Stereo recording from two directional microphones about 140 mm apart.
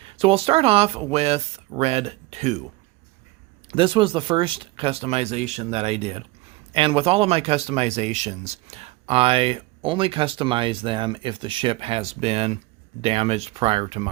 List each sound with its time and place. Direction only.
0.0 s speech: 40° right (ahead or behind)
3.7 s speech: 40° right (ahead or behind)